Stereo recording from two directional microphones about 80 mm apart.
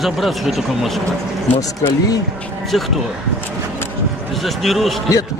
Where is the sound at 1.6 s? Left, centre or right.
Left.